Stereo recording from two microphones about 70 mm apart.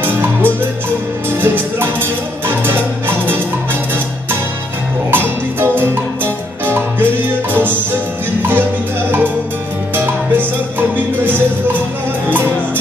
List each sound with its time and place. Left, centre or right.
0.0 s music: right
5.1 s music: right
8.4 s music: right
9.9 s music: right